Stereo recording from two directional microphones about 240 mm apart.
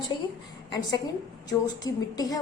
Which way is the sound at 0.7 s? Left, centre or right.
Centre.